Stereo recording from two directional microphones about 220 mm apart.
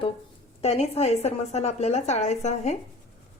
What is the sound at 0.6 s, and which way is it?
A woman's voice, 30° left (ahead or behind).